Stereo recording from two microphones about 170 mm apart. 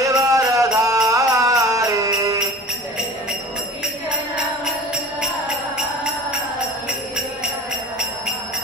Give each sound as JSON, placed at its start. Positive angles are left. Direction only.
{"t": 0.2, "sound": "music", "side_deg": -20}